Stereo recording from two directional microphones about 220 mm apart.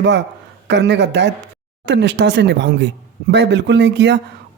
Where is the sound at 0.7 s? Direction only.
50° right (ahead or behind).